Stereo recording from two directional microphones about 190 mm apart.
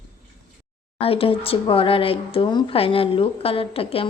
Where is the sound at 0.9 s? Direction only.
30° left (ahead or behind).